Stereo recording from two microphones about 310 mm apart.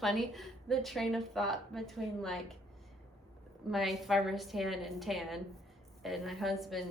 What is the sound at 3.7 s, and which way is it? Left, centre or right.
A woman's voice, centre.